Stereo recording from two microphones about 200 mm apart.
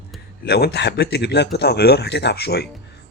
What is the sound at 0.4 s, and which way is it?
Speech, 55° left (ahead or behind).